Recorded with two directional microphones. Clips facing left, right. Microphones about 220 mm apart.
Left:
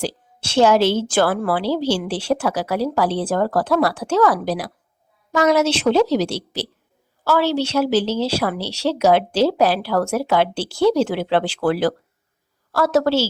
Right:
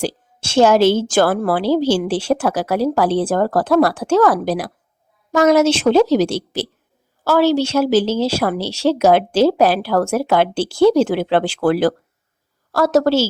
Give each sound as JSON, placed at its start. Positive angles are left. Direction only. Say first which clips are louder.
{"t": 0.0, "sound": "a woman's voice", "louder": "right 3 dB", "side_deg": -45}